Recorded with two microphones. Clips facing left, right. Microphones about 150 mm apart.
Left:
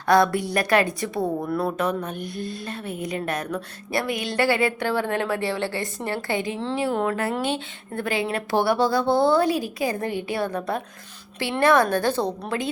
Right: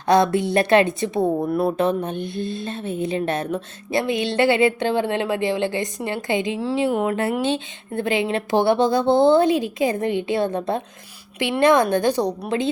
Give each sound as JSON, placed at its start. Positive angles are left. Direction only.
{"t": 0.1, "sound": "a woman's voice", "side_deg": -20}